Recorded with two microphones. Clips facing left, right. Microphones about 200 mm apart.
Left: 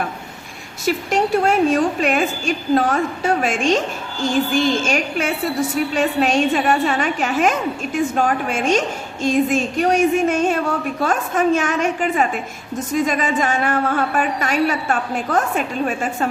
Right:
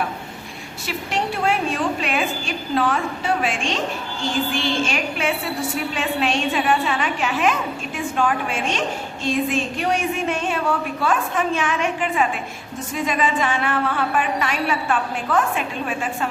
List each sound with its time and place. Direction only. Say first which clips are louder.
0.9 s a woman's voice: left 7 dB; 45° left (ahead or behind)